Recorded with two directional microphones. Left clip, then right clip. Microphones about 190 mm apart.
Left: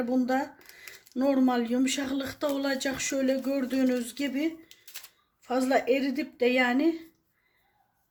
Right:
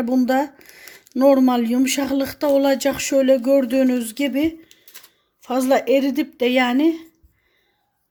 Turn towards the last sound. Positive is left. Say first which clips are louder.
# right 7 dB
turn(degrees=-45)  # may be behind; listen again after turning